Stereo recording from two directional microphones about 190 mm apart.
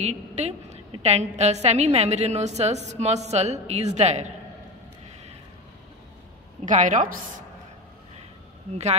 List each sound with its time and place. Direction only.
0.0 s a woman's voice: 35° right (ahead or behind)
6.6 s a woman's voice: 40° right (ahead or behind)